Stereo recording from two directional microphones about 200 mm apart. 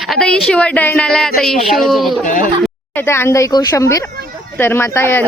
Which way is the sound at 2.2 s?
40° left (ahead or behind).